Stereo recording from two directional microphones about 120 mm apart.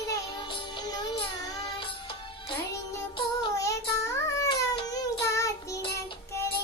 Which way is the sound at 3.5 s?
25° left (ahead or behind).